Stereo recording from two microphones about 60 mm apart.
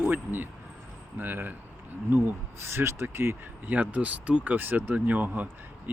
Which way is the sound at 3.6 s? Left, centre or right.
Right.